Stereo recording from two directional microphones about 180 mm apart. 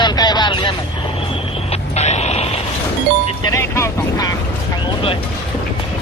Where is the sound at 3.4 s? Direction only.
15° left (ahead or behind).